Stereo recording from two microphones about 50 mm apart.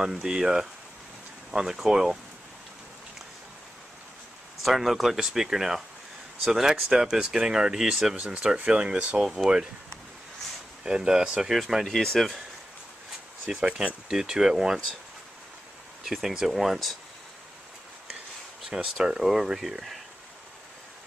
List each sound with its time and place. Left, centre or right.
0.0 s speech: centre
4.6 s speech: centre; by 9.2 s right
9.2 s speech: centre
10.8 s speech: centre
11.8 s speech: centre
13.5 s speech: centre
16.0 s speech: centre
18.7 s speech: centre